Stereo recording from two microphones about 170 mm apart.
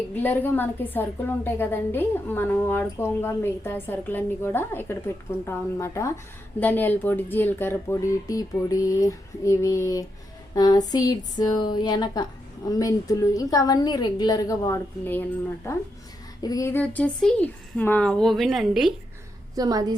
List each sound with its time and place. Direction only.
0.1 s a woman's voice: 10° left (ahead or behind)
19.5 s a woman's voice: 20° right (ahead or behind)